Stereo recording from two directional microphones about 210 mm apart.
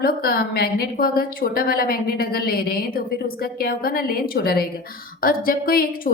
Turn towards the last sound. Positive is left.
turn(degrees=45)  # may be behind; listen again after turning